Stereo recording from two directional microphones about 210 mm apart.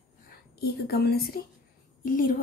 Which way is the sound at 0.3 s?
50° left (ahead or behind).